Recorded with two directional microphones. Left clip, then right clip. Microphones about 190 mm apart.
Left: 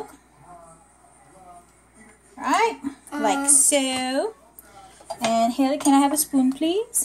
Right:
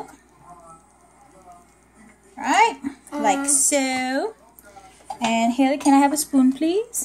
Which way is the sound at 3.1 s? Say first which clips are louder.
Right 1 dB; 5° right (ahead or behind).